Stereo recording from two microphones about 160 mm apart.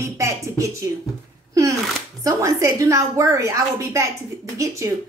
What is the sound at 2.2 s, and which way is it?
A woman's voice, 20° right (ahead or behind).